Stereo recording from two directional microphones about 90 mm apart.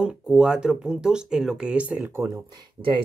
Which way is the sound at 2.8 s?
50° right (ahead or behind).